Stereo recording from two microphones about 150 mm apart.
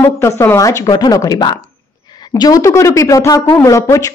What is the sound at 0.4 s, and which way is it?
A woman's voice, 20° left (ahead or behind).